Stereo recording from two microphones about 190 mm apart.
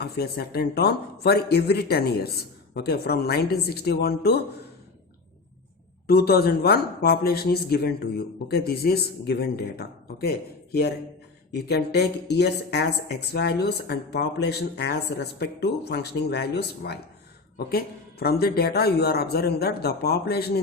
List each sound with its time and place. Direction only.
0.0 s speech: 55° left (ahead or behind)
6.1 s speech: 55° left (ahead or behind)